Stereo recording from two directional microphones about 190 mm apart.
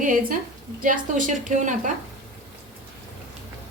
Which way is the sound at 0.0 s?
45° right (ahead or behind).